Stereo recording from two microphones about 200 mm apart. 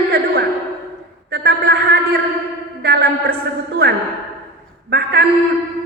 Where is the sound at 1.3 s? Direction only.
55° right (ahead or behind).